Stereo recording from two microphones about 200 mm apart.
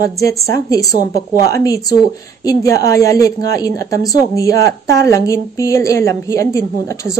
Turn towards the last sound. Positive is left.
turn(degrees=15)  # may be behind; listen again after turning